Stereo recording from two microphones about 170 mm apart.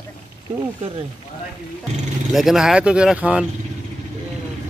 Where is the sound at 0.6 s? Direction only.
35° right (ahead or behind).